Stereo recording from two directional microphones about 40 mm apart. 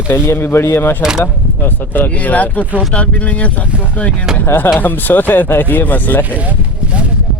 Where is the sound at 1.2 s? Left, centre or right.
Left.